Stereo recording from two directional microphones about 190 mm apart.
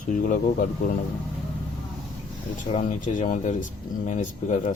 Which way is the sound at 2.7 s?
40° left (ahead or behind).